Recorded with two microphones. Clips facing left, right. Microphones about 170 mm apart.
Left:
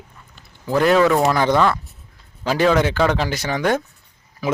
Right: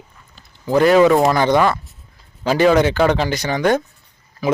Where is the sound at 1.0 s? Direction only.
15° right (ahead or behind).